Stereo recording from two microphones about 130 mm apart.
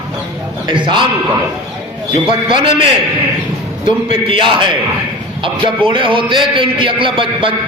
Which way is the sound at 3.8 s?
40° right (ahead or behind).